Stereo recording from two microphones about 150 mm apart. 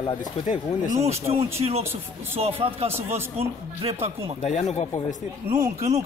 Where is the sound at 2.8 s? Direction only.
15° right (ahead or behind).